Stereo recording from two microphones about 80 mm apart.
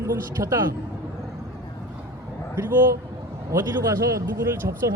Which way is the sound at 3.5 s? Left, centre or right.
Right.